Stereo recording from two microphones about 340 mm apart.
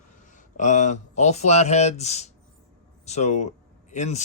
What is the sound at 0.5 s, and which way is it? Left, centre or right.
Speech, left.